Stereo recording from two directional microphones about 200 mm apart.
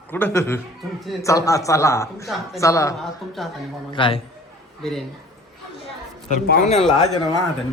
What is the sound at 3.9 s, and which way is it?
Speech, 25° left (ahead or behind).